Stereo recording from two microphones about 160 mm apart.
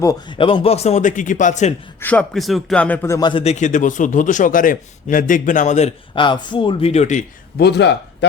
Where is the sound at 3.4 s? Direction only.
50° left (ahead or behind).